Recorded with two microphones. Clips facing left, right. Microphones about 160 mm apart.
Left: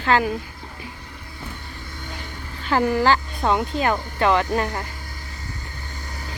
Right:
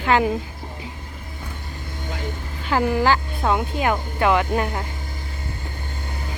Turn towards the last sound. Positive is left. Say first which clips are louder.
# even
turn(degrees=-5)  # may be behind; listen again after turning